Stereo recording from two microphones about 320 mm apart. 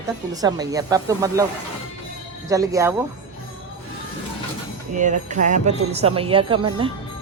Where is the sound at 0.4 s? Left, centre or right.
Centre.